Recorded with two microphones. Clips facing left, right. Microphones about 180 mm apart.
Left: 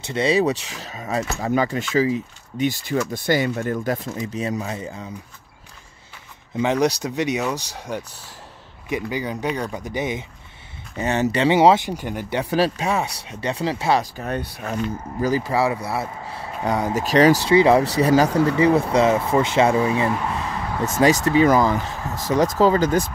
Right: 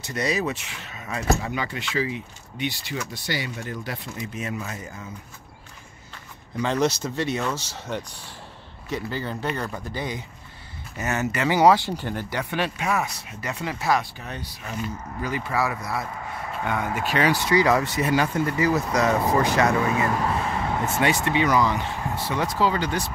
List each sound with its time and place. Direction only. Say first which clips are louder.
0.0 s speech: left 7 dB; 25° left (ahead or behind); by 4.1 s 45° left (ahead or behind)
4.2 s speech: left 6 dB; 35° left (ahead or behind)
6.5 s speech: left 3 dB; 15° left (ahead or behind)
11.0 s speech: left 6 dB; 30° left (ahead or behind); by 12.3 s 10° left (ahead or behind)
12.4 s speech: left 7 dB; 35° left (ahead or behind)
14.1 s speech: left 9 dB; 55° left (ahead or behind)
15.2 s speech: left 6 dB; 35° left (ahead or behind)
18.3 s speech: left 6 dB; 80° left
18.6 s speech: left 5 dB; 30° left (ahead or behind)
20.9 s speech: left 8 dB; 40° left (ahead or behind)